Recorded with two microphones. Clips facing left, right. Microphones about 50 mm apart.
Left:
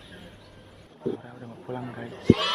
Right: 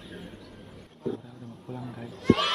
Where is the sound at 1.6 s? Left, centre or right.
Left.